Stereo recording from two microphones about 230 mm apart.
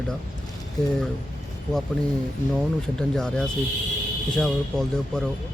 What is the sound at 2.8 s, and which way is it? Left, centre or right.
Speech, centre.